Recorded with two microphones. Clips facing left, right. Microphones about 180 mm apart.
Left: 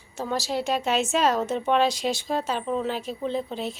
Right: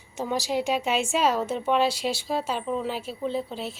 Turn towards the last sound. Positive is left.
turn(degrees=-5)  # may be behind; listen again after turning